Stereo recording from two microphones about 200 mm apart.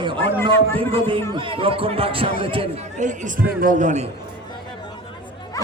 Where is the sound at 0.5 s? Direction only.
10° left (ahead or behind).